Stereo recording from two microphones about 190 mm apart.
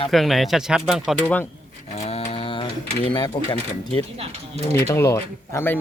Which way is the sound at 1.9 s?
35° left (ahead or behind).